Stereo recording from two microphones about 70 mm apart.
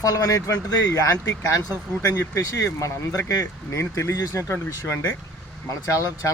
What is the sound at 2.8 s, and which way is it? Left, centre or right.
Speech, left.